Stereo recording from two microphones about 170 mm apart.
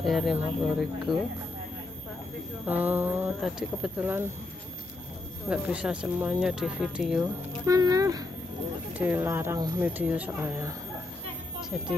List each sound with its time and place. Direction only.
0.0 s speech: centre (ahead or behind)
2.6 s speech: 10° right (ahead or behind)
5.5 s speech: 5° right (ahead or behind)
7.2 s speech: 20° right (ahead or behind)
8.9 s speech: 10° right (ahead or behind)